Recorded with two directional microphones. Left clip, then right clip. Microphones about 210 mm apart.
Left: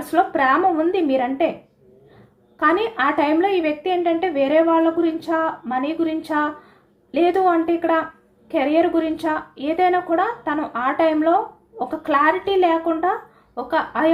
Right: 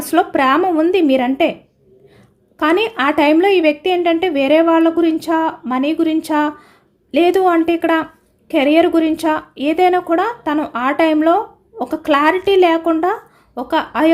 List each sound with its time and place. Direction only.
0.1 s a woman's voice: 60° right (ahead or behind)
2.6 s a woman's voice: 60° right (ahead or behind)